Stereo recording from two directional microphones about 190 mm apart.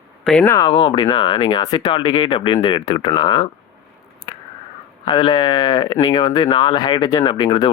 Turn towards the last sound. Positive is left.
turn(degrees=25)  # may be behind; listen again after turning